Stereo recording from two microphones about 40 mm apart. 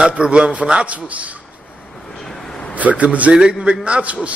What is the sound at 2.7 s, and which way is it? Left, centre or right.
Speech, right.